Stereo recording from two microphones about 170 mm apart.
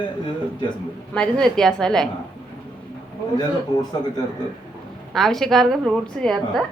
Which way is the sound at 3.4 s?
25° left (ahead or behind).